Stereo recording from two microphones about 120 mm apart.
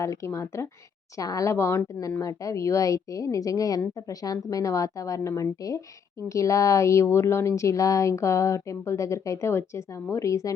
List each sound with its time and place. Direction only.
0.0 s speech: 25° left (ahead or behind)